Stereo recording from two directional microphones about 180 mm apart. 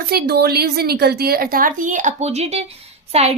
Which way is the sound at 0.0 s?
60° right (ahead or behind).